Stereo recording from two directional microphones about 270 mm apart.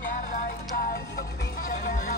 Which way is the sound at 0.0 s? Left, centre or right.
Left.